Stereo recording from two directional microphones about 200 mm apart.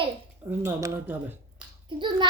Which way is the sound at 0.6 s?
15° right (ahead or behind).